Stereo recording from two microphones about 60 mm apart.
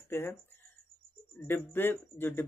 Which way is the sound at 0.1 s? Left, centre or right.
Left.